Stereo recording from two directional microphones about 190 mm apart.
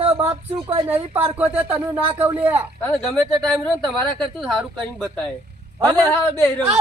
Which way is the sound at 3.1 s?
Centre (ahead or behind).